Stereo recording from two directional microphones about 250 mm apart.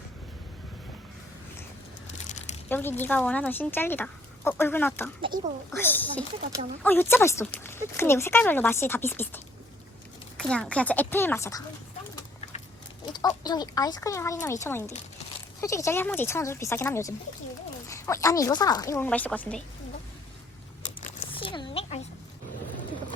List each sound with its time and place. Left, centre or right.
2.6 s speech: centre
5.2 s speech: right
5.7 s speech: centre
13.1 s speech: centre
21.0 s a sound: left